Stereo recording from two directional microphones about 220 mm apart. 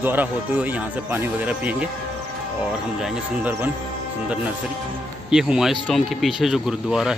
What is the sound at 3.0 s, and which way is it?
Speech, 5° right (ahead or behind).